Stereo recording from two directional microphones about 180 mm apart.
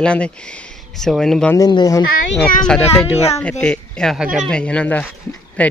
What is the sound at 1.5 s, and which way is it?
Speech, 20° left (ahead or behind).